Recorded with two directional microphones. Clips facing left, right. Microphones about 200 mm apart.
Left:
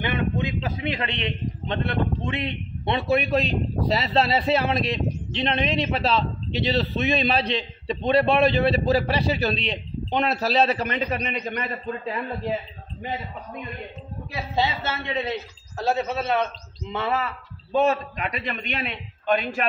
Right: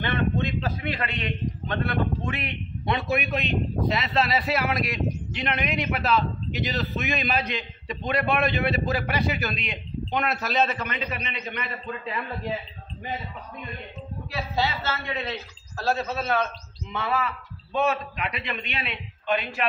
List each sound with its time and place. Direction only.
0.0 s a man's voice: 15° left (ahead or behind); by 11.7 s 40° left (ahead or behind)
14.3 s a man's voice: 20° left (ahead or behind)
17.7 s a man's voice: 40° left (ahead or behind)